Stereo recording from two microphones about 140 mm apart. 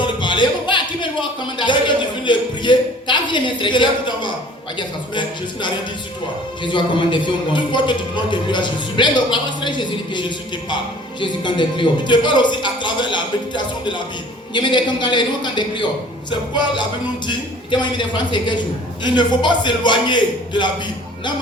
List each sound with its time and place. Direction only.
0.0 s music: 35° left (ahead or behind)
1.2 s a sound: 35° left (ahead or behind)
2.2 s a woman's voice: 35° left (ahead or behind)